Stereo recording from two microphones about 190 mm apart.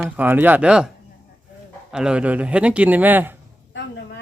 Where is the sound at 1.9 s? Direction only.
5° right (ahead or behind).